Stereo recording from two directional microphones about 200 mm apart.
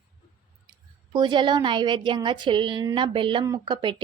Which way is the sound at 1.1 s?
25° right (ahead or behind).